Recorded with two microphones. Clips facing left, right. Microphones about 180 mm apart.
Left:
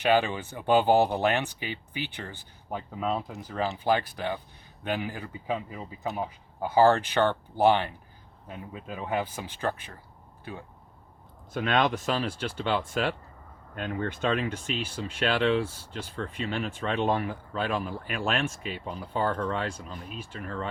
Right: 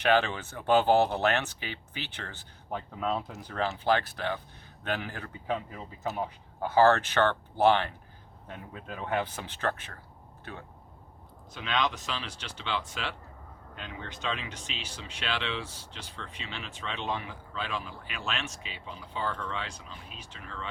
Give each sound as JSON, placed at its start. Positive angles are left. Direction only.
{"t": 0.0, "sound": "speech", "side_deg": 10}
{"t": 11.5, "sound": "speech", "side_deg": 50}